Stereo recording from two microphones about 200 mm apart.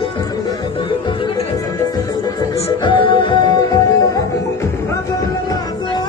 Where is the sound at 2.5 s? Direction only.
25° left (ahead or behind).